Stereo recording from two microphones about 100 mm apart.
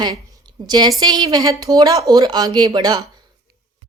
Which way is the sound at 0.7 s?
45° right (ahead or behind).